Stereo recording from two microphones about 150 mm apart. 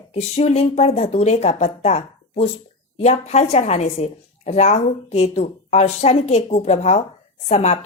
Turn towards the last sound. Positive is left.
turn(degrees=45)  # may be behind; listen again after turning